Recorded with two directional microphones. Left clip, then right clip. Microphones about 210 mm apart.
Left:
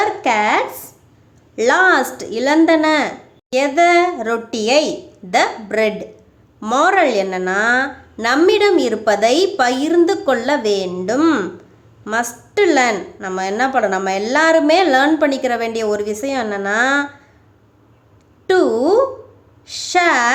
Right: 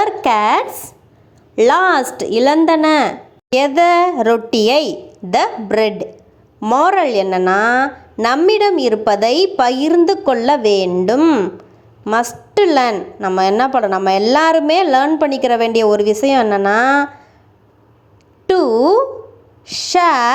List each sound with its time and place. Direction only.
0.0 s a woman's voice: 20° right (ahead or behind)
18.4 s a woman's voice: 15° right (ahead or behind)